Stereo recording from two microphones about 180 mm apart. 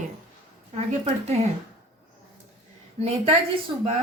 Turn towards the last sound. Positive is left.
turn(degrees=-35)  # may be behind; listen again after turning